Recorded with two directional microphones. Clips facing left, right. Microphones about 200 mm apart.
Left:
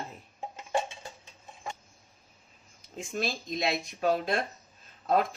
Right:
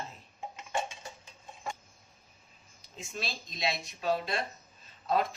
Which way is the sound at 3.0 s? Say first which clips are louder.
Left 7 dB; 50° left (ahead or behind).